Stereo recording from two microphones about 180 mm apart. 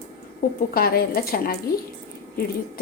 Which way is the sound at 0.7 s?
55° left (ahead or behind).